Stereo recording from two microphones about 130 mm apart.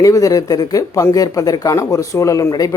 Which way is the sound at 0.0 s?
25° left (ahead or behind).